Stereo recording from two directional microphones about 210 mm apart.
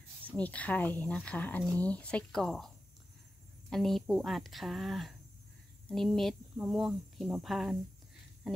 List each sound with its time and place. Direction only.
0.3 s speech: 5° left (ahead or behind)
3.7 s speech: centre (ahead or behind)